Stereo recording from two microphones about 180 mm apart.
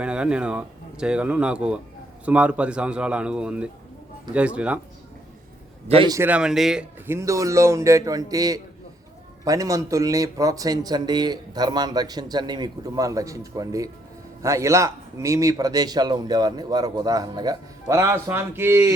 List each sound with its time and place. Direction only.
0.0 s speech: 5° right (ahead or behind)
6.1 s speech: 15° right (ahead or behind)
7.1 s speech: 15° right (ahead or behind)